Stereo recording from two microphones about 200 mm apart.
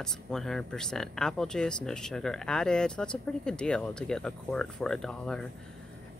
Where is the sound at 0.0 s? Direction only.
Centre (ahead or behind).